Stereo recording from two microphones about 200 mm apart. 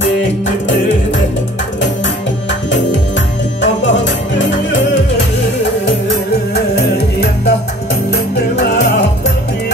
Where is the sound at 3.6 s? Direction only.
65° left (ahead or behind).